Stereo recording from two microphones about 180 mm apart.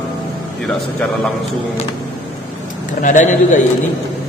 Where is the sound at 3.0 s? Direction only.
45° left (ahead or behind).